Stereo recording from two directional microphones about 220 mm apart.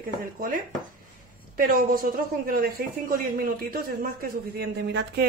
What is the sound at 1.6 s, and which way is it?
A woman's voice, 40° right (ahead or behind).